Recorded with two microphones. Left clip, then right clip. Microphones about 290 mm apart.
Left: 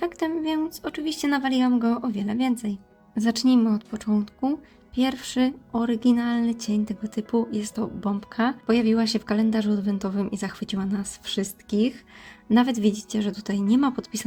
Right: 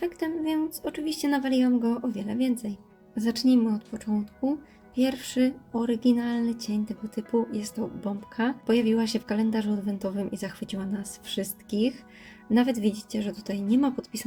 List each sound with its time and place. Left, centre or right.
0.5 s speech: left